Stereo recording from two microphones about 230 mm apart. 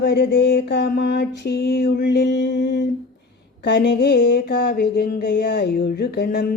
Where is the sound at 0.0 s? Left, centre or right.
Left.